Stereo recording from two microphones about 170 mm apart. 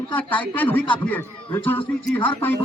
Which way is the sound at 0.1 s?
10° left (ahead or behind).